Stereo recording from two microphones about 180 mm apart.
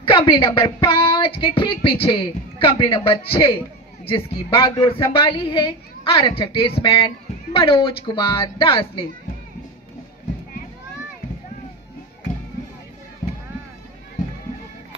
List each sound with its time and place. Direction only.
0.0 s speech: 25° left (ahead or behind)